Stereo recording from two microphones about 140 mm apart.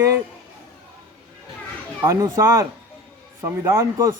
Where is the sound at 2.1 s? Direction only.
25° right (ahead or behind).